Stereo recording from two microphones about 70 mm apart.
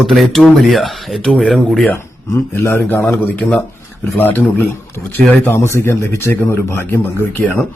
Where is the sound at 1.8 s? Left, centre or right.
Left.